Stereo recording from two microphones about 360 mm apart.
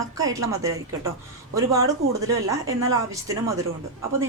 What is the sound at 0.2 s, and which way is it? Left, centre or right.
A woman's voice, centre.